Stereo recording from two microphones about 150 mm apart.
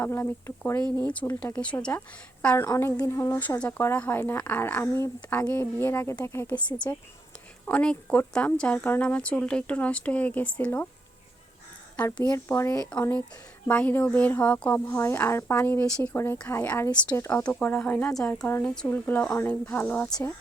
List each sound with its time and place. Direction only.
0.0 s a woman's voice: 15° left (ahead or behind)
2.6 s speech: 20° left (ahead or behind)
7.7 s speech: 10° left (ahead or behind)
12.0 s speech: 10° left (ahead or behind)